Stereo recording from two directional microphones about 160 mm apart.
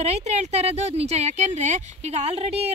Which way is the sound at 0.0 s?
45° right (ahead or behind).